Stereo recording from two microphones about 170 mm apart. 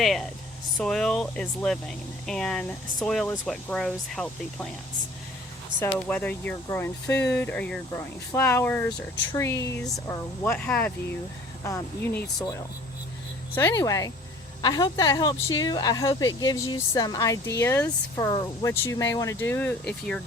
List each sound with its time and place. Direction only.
0.0 s speech: centre (ahead or behind)
6.1 s speech: 10° left (ahead or behind)
13.6 s speech: 20° left (ahead or behind)